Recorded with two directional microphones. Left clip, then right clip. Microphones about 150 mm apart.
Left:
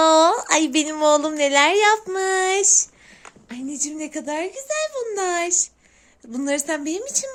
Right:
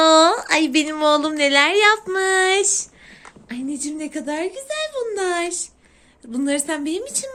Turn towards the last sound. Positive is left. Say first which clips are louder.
# even
turn(degrees=35)  # may be behind; listen again after turning